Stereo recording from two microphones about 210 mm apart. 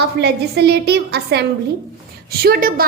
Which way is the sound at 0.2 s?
50° right (ahead or behind).